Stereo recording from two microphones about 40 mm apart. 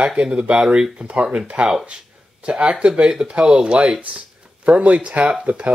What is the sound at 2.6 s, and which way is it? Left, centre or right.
Speech, right.